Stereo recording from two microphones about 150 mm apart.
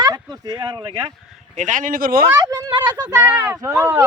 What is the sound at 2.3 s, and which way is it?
Speech, 20° right (ahead or behind).